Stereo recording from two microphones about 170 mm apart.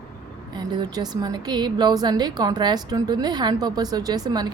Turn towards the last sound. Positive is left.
turn(degrees=-25)  # may be behind; listen again after turning